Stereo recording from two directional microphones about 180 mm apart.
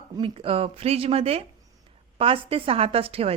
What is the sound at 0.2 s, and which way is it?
A woman's voice, 30° right (ahead or behind).